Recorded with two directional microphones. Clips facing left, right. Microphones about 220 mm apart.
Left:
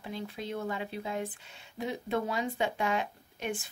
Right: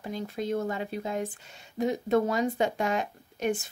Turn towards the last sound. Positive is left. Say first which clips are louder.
# right 7 dB
turn(degrees=-40)  # may be behind; listen again after turning